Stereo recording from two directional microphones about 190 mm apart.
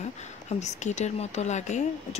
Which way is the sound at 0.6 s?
40° left (ahead or behind).